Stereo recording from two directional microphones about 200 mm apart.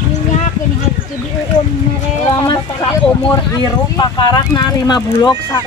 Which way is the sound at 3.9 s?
20° left (ahead or behind).